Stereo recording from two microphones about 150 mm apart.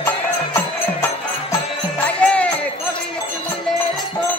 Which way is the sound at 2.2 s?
10° left (ahead or behind).